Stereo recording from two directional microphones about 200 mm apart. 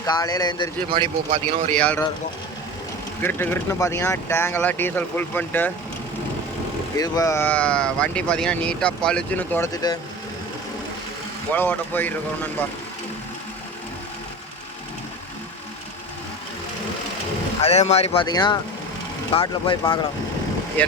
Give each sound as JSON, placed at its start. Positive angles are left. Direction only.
{"t": 0.0, "sound": "speech", "side_deg": 20}
{"t": 0.9, "sound": "speech", "side_deg": -25}
{"t": 1.7, "sound": "speech", "side_deg": 5}
{"t": 3.2, "sound": "speech", "side_deg": 10}
{"t": 6.9, "sound": "speech", "side_deg": 20}
{"t": 9.7, "sound": "speech", "side_deg": 20}
{"t": 11.5, "sound": "speech", "side_deg": 10}
{"t": 17.6, "sound": "speech", "side_deg": 30}
{"t": 20.8, "sound": "speech", "side_deg": 5}